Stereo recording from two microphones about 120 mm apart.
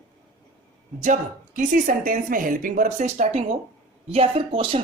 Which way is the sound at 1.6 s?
90° right.